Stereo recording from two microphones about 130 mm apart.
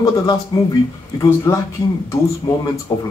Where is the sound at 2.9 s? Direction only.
35° left (ahead or behind).